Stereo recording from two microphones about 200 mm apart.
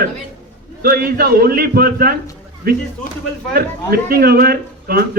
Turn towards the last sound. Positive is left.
turn(degrees=-50)  # may be behind; listen again after turning